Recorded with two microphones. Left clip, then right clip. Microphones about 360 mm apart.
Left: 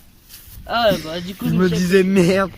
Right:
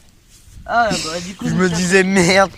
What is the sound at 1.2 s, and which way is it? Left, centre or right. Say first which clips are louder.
Speech: right 1 dB; centre.